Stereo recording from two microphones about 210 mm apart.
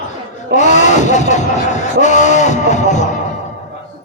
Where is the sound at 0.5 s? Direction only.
35° left (ahead or behind).